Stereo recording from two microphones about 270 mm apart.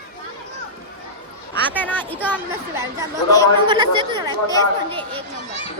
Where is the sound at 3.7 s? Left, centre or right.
Centre.